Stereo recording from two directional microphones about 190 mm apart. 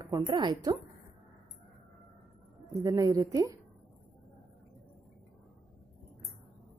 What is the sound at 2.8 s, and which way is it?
Speech, 20° right (ahead or behind).